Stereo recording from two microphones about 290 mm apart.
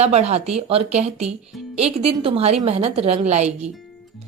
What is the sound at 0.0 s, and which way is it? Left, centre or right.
A woman's voice, right.